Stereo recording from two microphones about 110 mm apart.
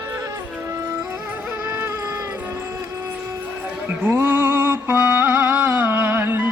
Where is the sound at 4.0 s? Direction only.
20° right (ahead or behind).